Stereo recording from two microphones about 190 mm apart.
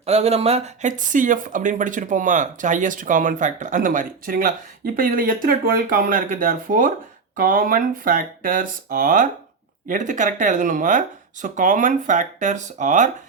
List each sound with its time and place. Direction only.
0.0 s speech: 35° right (ahead or behind)